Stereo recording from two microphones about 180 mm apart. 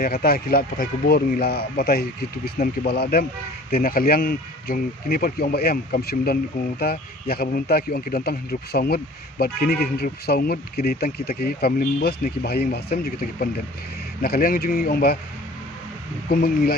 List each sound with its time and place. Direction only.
0.0 s speech: 55° left (ahead or behind)
16.3 s speech: 60° left (ahead or behind)